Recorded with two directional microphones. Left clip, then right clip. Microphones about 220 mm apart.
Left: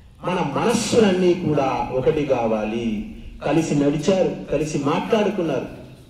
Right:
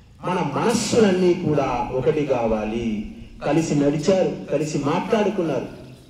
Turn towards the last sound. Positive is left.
turn(degrees=35)  # may be behind; listen again after turning